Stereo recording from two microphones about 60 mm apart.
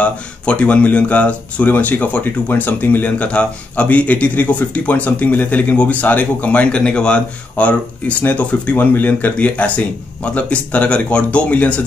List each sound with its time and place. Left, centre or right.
0.0 s speech: left